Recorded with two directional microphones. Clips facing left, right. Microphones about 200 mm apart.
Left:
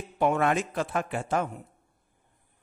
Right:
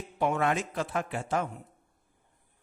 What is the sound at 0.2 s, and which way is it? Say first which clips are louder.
Speech: left 3 dB; 55° left (ahead or behind).